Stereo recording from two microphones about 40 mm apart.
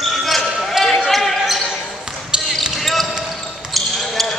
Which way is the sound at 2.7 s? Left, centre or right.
Centre.